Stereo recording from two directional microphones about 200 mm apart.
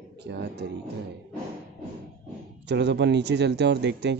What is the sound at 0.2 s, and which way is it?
Speech, 55° right (ahead or behind).